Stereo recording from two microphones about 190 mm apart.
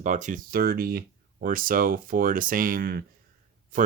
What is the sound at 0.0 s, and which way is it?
Speech, 40° right (ahead or behind).